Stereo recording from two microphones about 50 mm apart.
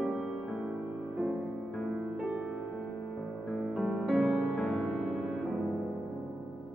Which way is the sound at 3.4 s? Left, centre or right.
Centre.